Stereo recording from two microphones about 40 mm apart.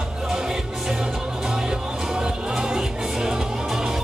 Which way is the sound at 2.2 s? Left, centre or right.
Centre.